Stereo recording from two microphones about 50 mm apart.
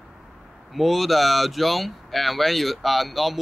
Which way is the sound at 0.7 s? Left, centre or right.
Centre.